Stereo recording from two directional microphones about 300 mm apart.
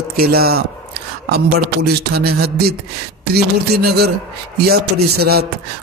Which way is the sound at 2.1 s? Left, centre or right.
Right.